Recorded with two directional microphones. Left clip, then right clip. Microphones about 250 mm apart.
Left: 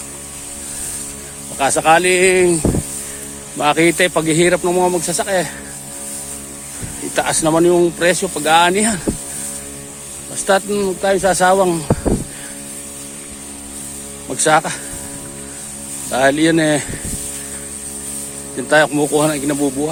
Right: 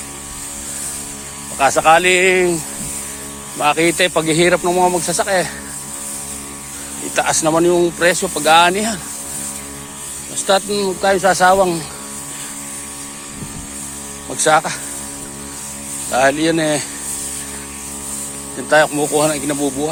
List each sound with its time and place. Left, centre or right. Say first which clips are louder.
1.5 s speech: right 1 dB; left
3.6 s speech: left 1 dB; left
7.1 s speech: even; left
10.4 s speech: even; left
14.3 s speech: even; left
16.1 s speech: left 1 dB; left
18.7 s speech: even; left